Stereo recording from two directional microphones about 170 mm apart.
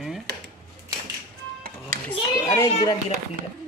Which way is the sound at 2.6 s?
25° left (ahead or behind).